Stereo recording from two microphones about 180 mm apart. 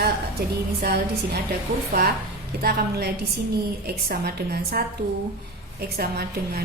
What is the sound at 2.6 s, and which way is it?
A woman's voice, 60° right (ahead or behind).